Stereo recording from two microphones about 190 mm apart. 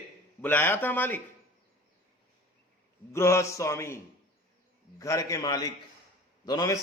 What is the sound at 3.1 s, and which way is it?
A man's voice, 15° left (ahead or behind).